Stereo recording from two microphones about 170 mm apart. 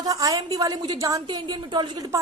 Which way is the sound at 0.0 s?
20° right (ahead or behind).